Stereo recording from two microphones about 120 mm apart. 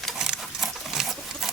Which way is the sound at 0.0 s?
Centre (ahead or behind).